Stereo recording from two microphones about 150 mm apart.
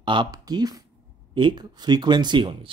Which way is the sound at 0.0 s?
30° right (ahead or behind).